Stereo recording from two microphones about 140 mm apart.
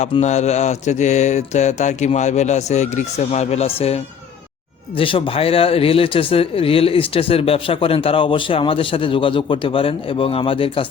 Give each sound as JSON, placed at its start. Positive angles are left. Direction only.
{"t": 0.2, "sound": "speech", "side_deg": 55}